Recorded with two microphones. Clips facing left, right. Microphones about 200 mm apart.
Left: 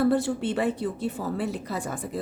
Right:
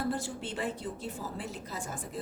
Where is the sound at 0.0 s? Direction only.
65° left (ahead or behind).